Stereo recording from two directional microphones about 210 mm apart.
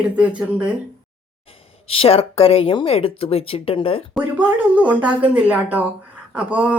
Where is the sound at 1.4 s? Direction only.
25° left (ahead or behind).